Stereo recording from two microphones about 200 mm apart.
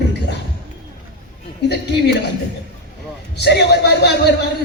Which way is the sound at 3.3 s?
55° left (ahead or behind).